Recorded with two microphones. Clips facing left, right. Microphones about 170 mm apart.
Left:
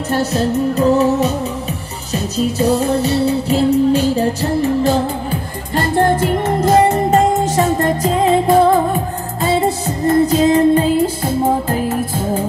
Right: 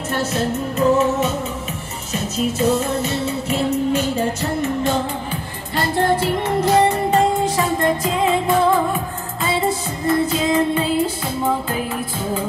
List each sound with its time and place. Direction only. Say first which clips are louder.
0.1 s music: left 5 dB; 35° left (ahead or behind)
5.8 s music: left 4 dB; 45° left (ahead or behind)